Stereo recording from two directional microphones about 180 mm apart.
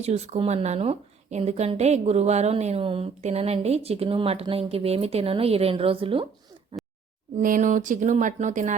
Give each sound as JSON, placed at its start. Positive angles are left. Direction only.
{"t": 0.0, "sound": "a woman's voice", "side_deg": -40}
{"t": 7.3, "sound": "speech", "side_deg": -45}